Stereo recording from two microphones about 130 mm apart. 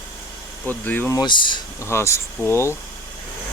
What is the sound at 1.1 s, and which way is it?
Speech, 35° left (ahead or behind).